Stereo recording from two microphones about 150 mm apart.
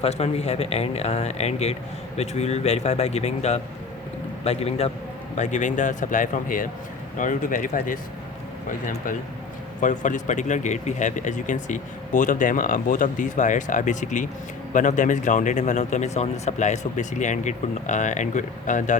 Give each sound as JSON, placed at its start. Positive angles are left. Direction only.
{"t": 0.0, "sound": "speech", "side_deg": 45}
{"t": 9.8, "sound": "speech", "side_deg": 55}